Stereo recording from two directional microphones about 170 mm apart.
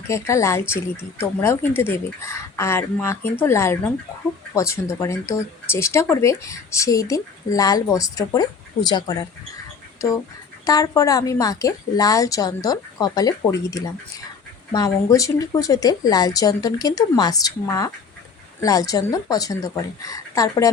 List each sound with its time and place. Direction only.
0.1 s speech: 15° left (ahead or behind)